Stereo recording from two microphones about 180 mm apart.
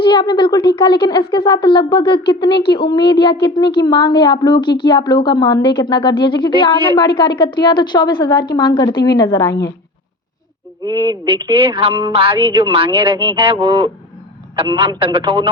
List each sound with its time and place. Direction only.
0.1 s a woman's voice: 25° left (ahead or behind)
10.8 s a man's voice: 25° right (ahead or behind)